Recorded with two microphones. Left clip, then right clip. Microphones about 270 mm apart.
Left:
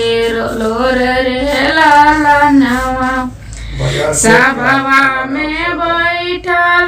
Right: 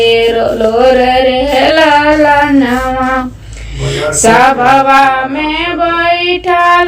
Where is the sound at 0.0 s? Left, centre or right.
Centre.